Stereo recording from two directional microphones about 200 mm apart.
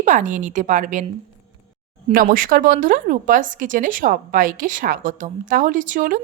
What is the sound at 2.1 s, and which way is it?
A woman's voice, 45° right (ahead or behind).